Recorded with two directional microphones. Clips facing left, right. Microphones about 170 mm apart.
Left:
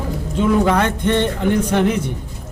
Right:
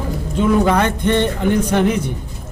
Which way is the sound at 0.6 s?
15° right (ahead or behind).